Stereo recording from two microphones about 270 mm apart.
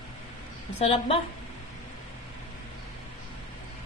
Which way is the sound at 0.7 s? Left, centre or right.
Left.